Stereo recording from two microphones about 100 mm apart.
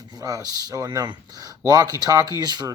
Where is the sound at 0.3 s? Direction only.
40° right (ahead or behind).